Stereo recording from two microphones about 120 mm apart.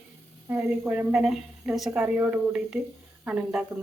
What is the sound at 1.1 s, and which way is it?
Speech, 5° right (ahead or behind).